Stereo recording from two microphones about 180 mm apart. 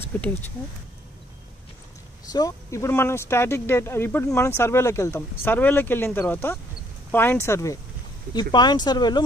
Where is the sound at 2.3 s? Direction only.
20° left (ahead or behind).